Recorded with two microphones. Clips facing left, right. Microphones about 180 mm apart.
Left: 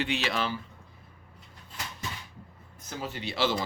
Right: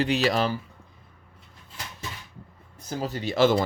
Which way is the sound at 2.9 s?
35° right (ahead or behind).